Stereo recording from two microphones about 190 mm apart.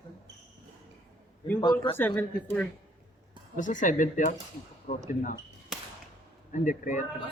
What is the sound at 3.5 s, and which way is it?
Speech, 40° left (ahead or behind).